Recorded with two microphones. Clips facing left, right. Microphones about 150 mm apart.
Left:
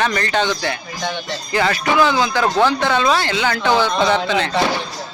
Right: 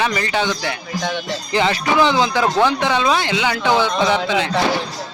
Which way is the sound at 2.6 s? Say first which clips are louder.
Left 2 dB; 15° right (ahead or behind).